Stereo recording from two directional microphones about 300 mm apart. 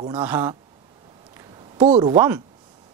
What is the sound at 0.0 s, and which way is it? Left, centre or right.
Speech, centre.